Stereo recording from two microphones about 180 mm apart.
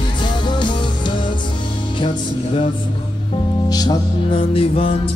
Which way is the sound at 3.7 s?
20° left (ahead or behind).